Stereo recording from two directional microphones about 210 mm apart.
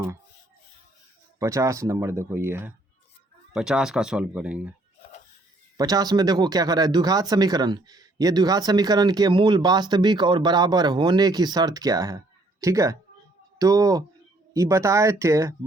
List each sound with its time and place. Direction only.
1.4 s speech: 15° right (ahead or behind)
5.7 s speech: 15° right (ahead or behind)